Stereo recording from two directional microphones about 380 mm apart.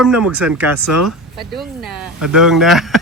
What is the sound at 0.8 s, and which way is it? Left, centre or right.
Speech, right.